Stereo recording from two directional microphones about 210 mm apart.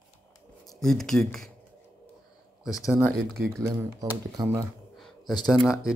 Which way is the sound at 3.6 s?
15° right (ahead or behind).